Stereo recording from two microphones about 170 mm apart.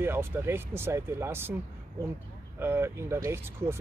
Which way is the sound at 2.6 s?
15° right (ahead or behind).